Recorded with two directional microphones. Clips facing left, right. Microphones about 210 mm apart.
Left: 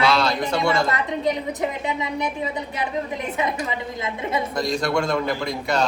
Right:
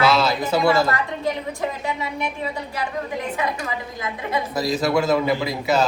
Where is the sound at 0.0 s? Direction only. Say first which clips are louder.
Right 1 dB; 5° right (ahead or behind).